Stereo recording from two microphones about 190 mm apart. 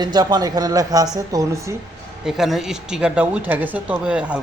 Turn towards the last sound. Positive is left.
turn(degrees=-5)  # may be behind; listen again after turning